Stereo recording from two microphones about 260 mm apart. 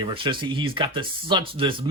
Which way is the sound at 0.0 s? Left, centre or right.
Centre.